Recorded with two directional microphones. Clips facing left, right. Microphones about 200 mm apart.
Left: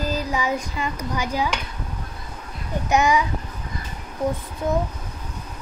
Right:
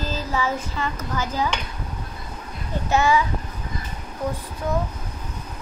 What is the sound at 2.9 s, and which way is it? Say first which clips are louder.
Speech: even; 15° left (ahead or behind).